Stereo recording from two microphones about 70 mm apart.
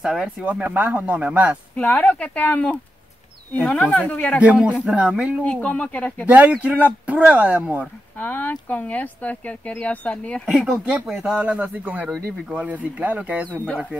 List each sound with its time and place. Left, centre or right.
0.0 s speech: centre
0.5 s speech: right
1.8 s speech: left
4.4 s speech: centre
5.4 s speech: centre
6.2 s speech: right
8.2 s speech: left
11.3 s speech: centre